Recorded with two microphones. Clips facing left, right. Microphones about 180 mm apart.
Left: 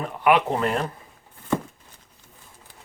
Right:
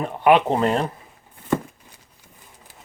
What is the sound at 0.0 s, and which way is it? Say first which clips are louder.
Speech: right 3 dB; 30° right (ahead or behind).